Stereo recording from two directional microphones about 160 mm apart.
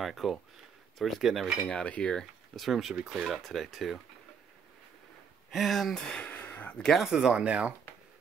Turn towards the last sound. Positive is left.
turn(degrees=-5)  # may be behind; listen again after turning